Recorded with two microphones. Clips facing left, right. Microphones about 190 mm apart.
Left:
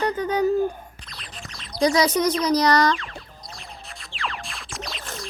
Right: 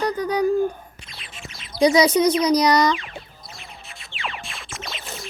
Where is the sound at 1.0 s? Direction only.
Centre (ahead or behind).